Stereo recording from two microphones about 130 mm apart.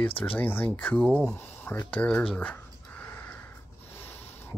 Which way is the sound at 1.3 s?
15° left (ahead or behind).